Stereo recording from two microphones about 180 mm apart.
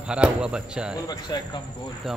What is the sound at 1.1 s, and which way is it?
Speech, 20° left (ahead or behind).